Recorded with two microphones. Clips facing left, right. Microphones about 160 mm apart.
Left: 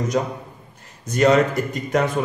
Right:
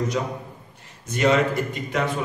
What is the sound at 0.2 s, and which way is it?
A man's voice, 50° left (ahead or behind).